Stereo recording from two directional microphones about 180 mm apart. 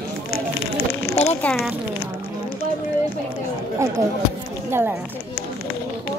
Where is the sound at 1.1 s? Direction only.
35° left (ahead or behind).